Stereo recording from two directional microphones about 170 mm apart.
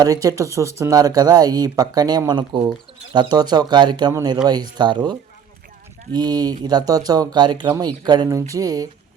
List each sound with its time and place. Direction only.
0.0 s speech: 20° right (ahead or behind)
6.1 s speech: 25° right (ahead or behind)